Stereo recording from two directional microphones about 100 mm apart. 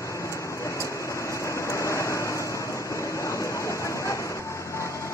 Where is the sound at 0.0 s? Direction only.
30° left (ahead or behind).